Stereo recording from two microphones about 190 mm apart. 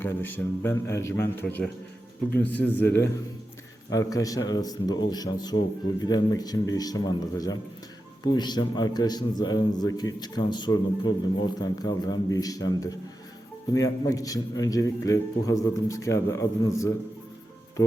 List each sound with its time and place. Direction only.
0.0 s a man's voice: 10° left (ahead or behind)